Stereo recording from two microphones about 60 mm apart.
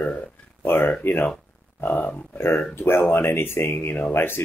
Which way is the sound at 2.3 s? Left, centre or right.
Left.